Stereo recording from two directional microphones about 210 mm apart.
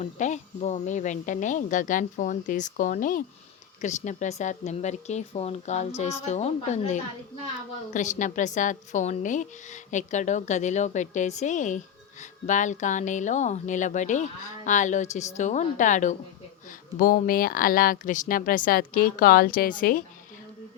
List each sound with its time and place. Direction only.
0.0 s speech: 35° left (ahead or behind)